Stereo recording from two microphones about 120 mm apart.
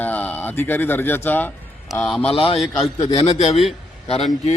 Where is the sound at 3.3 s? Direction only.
65° left (ahead or behind).